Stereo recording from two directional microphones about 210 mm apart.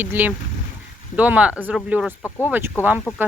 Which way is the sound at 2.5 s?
10° right (ahead or behind).